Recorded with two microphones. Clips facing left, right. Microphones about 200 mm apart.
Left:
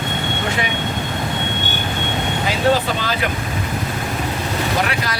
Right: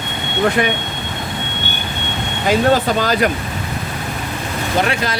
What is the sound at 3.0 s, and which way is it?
Speech, 45° right (ahead or behind).